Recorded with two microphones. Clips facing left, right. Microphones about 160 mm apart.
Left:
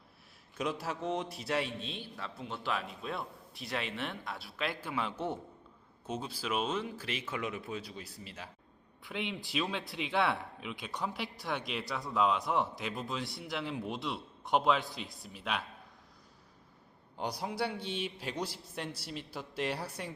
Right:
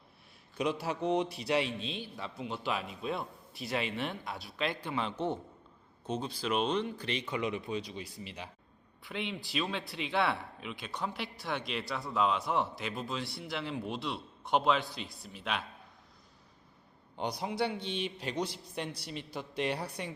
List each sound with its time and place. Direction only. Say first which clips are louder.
0.5 s a man's voice: right 3 dB; centre (ahead or behind)
9.0 s a man's voice: even; 5° left (ahead or behind)
17.2 s a man's voice: right 2 dB; 5° left (ahead or behind)